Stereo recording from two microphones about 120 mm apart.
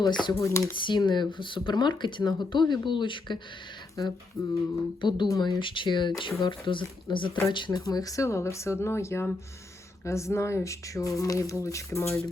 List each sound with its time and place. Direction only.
0.0 s speech: 40° left (ahead or behind)
0.3 s speech: 25° left (ahead or behind)
0.8 s speech: 40° left (ahead or behind); by 12.2 s 25° left (ahead or behind)